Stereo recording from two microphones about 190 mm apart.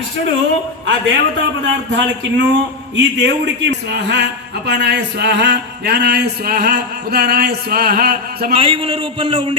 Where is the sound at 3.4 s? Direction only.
65° right (ahead or behind).